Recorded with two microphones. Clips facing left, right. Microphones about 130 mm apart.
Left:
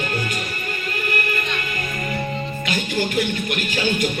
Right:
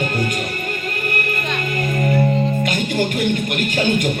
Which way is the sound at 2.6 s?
50° right (ahead or behind).